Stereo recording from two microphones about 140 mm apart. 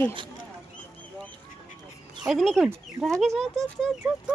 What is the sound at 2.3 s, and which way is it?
Speech, centre (ahead or behind).